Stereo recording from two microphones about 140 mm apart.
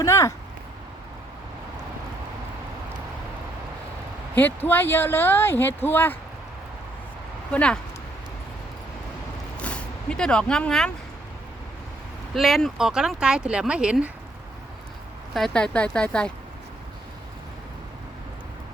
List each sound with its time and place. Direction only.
0.0 s speech: 20° left (ahead or behind)
4.4 s speech: 15° left (ahead or behind)
7.5 s speech: 5° left (ahead or behind)
9.6 s speech: 10° left (ahead or behind)
12.3 s speech: centre (ahead or behind)
15.3 s speech: centre (ahead or behind)